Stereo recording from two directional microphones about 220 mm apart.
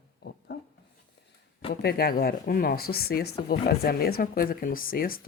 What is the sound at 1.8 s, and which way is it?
Speech, 45° left (ahead or behind).